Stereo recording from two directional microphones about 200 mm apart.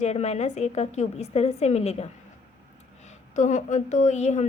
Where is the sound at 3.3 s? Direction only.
35° left (ahead or behind).